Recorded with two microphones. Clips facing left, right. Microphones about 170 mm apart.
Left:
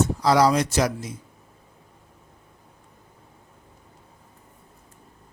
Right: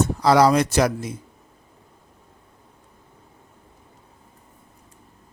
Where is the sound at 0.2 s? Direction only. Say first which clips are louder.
Right 4 dB; 60° right (ahead or behind).